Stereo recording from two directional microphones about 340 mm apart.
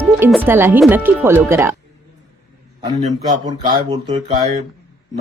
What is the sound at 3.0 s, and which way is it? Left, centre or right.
Speech, centre.